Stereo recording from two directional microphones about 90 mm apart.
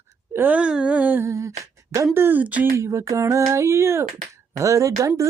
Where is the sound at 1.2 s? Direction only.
35° right (ahead or behind).